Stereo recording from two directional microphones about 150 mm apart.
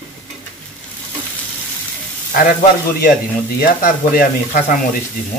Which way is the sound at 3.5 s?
75° left (ahead or behind).